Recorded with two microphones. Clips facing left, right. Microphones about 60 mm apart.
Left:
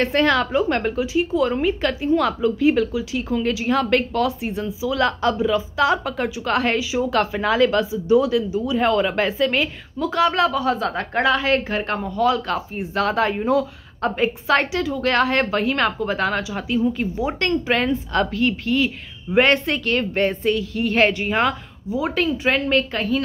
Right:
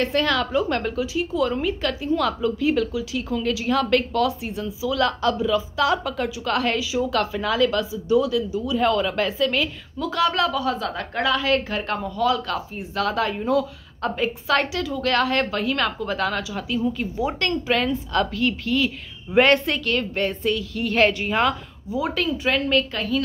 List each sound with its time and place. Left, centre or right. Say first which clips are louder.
0.0 s a woman's voice: left 3 dB; left; by 19.8 s centre
19.9 s a woman's voice: left 4 dB; left